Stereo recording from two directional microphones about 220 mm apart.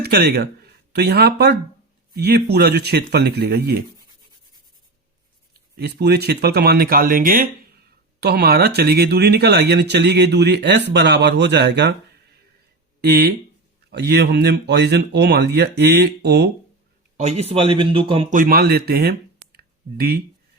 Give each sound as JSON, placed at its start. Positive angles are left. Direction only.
{"t": 0.0, "sound": "speech", "side_deg": -45}
{"t": 5.7, "sound": "speech", "side_deg": -50}
{"t": 13.0, "sound": "speech", "side_deg": -45}
{"t": 17.2, "sound": "speech", "side_deg": -30}
{"t": 18.3, "sound": "speech", "side_deg": -40}
{"t": 19.5, "sound": "a sound", "side_deg": -45}